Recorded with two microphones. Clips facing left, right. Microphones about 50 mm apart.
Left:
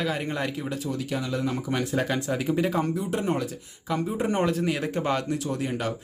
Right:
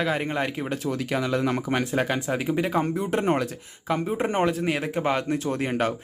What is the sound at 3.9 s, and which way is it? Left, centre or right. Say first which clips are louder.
Speech: right 1 dB; right.